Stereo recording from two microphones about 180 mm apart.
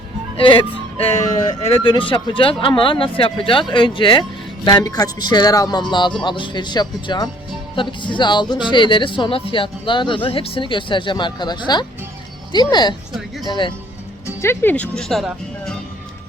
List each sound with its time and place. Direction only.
0.3 s speech: 30° left (ahead or behind)
14.3 s speech: 15° left (ahead or behind)